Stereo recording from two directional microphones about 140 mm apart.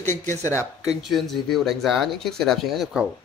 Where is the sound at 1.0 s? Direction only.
Centre (ahead or behind).